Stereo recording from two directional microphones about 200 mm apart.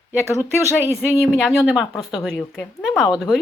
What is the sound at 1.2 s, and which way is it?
Speech, centre (ahead or behind).